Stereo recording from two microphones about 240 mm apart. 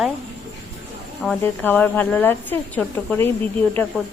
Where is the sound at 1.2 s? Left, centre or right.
Centre.